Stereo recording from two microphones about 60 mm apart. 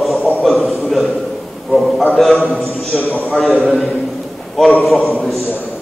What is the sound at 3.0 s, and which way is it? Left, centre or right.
Speech, left.